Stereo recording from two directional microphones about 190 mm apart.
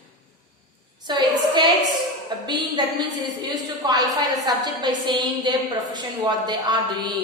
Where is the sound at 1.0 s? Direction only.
25° right (ahead or behind).